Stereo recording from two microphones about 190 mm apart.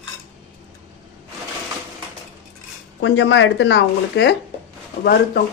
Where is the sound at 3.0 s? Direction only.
75° left (ahead or behind).